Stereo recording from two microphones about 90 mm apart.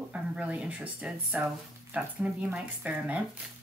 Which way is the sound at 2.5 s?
15° right (ahead or behind).